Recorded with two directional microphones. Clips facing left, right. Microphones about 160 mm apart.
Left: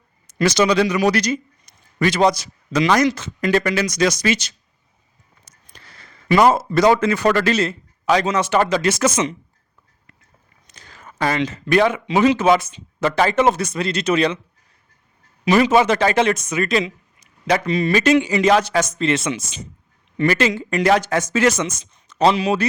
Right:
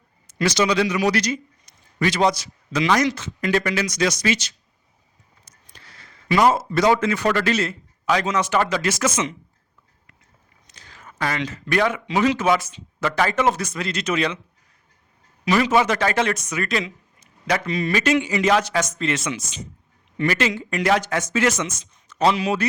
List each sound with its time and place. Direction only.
0.3 s a man's voice: 50° left (ahead or behind)
6.0 s a sound: 55° left (ahead or behind)
6.7 s a man's voice: 40° left (ahead or behind); by 9.0 s 25° left (ahead or behind)
9.0 s a man's voice: 35° left (ahead or behind)
10.7 s a sound: 50° left (ahead or behind)
11.2 s speech: 30° left (ahead or behind)
15.4 s speech: 25° left (ahead or behind)
20.1 s a man's voice: 40° left (ahead or behind)